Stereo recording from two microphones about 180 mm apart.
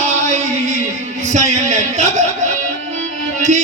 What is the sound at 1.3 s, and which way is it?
Music, 40° right (ahead or behind).